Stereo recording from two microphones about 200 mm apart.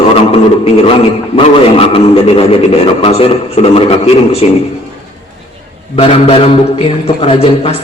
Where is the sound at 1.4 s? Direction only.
30° left (ahead or behind).